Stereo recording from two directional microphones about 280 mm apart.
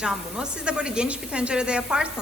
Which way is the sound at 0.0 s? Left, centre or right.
Centre.